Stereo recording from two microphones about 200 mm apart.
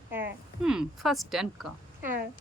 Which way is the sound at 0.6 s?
5° right (ahead or behind).